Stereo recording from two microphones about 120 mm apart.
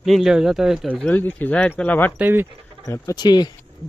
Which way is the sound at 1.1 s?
15° left (ahead or behind).